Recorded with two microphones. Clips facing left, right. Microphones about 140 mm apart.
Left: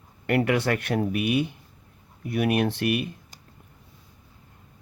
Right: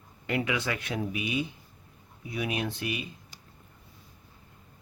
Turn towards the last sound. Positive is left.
turn(degrees=60)  # may be behind; listen again after turning